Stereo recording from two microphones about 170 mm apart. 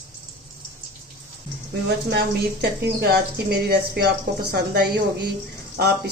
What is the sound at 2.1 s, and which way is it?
Speech, 70° right (ahead or behind).